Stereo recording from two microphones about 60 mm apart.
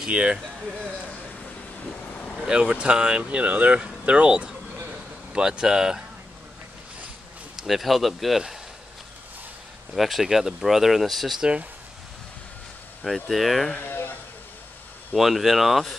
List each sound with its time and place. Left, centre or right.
0.0 s speech: centre
2.4 s speech: centre
7.5 s speech: centre
9.9 s speech: centre
13.0 s speech: centre
13.8 s a sound: left
15.1 s speech: centre